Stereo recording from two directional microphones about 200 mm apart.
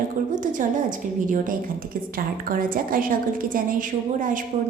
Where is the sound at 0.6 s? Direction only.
40° right (ahead or behind).